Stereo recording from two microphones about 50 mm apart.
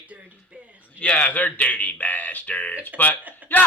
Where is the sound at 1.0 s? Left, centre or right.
Left.